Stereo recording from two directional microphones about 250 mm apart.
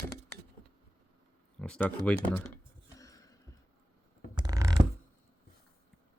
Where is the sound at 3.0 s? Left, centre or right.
Centre.